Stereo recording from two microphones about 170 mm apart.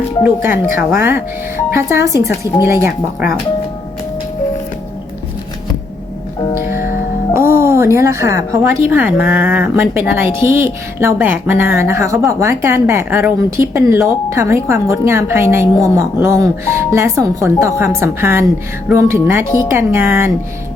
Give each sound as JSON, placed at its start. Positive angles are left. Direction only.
{"t": 0.4, "sound": "a woman's voice", "side_deg": -10}
{"t": 7.3, "sound": "a sound", "side_deg": -15}
{"t": 8.9, "sound": "a woman's voice", "side_deg": -10}